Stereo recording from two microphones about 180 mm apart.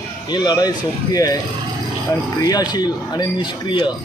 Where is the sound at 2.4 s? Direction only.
20° left (ahead or behind).